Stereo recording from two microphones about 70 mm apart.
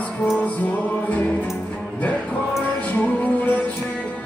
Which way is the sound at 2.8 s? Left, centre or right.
Centre.